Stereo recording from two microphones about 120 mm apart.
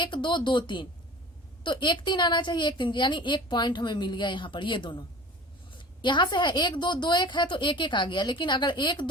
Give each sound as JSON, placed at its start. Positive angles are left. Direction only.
{"t": 0.0, "sound": "a woman's voice", "side_deg": 40}